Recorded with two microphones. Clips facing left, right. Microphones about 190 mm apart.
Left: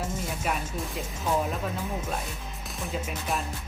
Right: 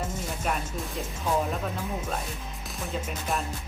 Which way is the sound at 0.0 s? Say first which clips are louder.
Even; 10° left (ahead or behind).